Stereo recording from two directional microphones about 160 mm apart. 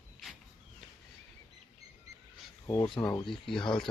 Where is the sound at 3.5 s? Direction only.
5° left (ahead or behind).